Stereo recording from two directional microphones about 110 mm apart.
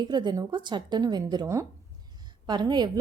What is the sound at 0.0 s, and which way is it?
A woman's voice, 40° right (ahead or behind).